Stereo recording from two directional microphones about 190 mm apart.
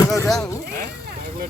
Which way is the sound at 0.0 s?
15° left (ahead or behind).